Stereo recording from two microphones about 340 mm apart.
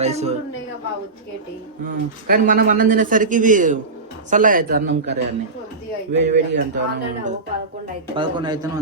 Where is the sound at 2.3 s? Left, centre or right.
Right.